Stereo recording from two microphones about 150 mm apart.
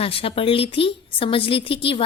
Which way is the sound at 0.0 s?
40° left (ahead or behind).